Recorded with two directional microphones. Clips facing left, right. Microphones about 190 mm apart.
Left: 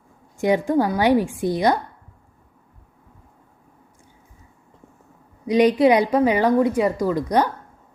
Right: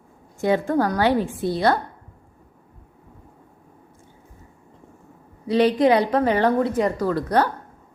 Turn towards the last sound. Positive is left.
turn(degrees=15)  # may be behind; listen again after turning